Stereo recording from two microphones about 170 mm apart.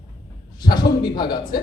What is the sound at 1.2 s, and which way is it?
Speech, 25° left (ahead or behind).